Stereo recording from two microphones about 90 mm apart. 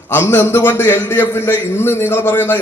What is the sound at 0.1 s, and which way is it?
A man's voice, 25° left (ahead or behind).